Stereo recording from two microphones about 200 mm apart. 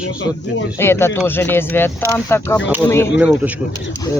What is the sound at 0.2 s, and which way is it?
Speech, 70° left (ahead or behind).